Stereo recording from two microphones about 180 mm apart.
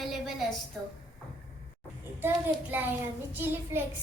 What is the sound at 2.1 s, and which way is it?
A child's voice, 10° right (ahead or behind).